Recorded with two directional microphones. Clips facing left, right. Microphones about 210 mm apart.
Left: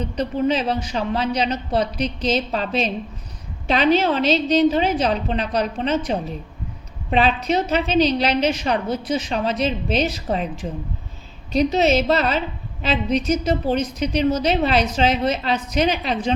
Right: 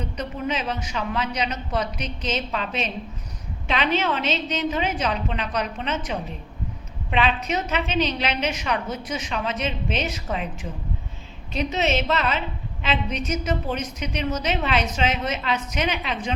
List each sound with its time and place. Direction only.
0.0 s a woman's voice: 30° left (ahead or behind)